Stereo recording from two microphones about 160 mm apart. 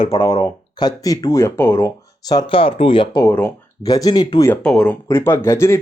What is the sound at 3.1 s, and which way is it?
Speech, 15° left (ahead or behind).